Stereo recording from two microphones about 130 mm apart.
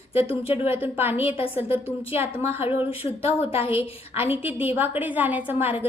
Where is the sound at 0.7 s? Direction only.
15° right (ahead or behind).